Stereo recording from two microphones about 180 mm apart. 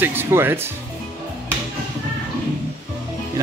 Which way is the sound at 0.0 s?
10° right (ahead or behind).